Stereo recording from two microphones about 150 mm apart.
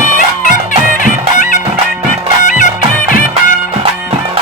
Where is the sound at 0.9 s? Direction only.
60° left (ahead or behind).